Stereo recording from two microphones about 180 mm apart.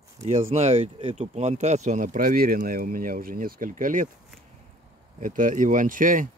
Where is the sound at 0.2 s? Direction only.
35° right (ahead or behind).